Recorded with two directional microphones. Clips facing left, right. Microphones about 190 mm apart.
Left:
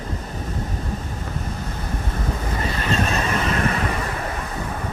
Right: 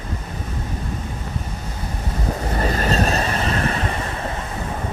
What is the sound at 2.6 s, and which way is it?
Vehicle, 40° right (ahead or behind).